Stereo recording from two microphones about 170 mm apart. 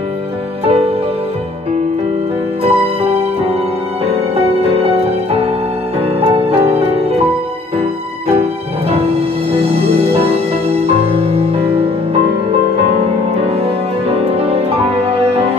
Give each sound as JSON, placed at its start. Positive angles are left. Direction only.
{"t": 0.7, "sound": "music", "side_deg": -35}
{"t": 2.6, "sound": "music", "side_deg": -35}
{"t": 14.0, "sound": "music", "side_deg": -35}